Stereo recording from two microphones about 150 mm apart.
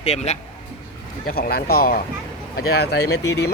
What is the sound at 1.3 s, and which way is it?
Speech, 90° left.